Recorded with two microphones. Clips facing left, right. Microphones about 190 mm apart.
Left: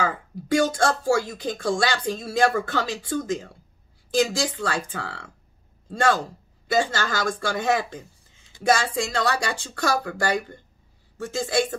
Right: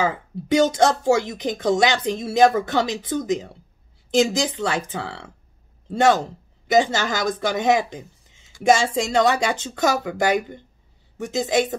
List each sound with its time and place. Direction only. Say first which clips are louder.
0.0 s speech: right 3 dB; 20° right (ahead or behind)